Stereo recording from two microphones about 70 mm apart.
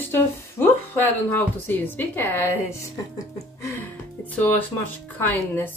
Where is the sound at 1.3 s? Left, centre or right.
Left.